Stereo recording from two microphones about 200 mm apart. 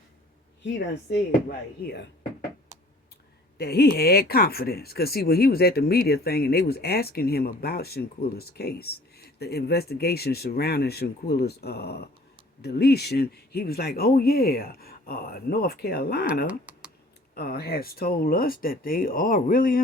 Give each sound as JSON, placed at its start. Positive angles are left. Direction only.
{"t": 0.6, "sound": "speech", "side_deg": 60}
{"t": 3.6, "sound": "speech", "side_deg": 50}
{"t": 16.5, "sound": "computer keyboard", "side_deg": -5}
{"t": 17.3, "sound": "speech", "side_deg": 50}